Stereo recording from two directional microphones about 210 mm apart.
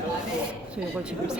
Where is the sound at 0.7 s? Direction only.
5° right (ahead or behind).